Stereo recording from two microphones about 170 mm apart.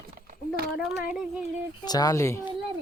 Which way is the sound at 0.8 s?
5° right (ahead or behind).